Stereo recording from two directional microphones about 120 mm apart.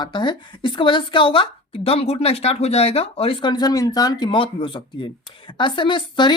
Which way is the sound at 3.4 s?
35° left (ahead or behind).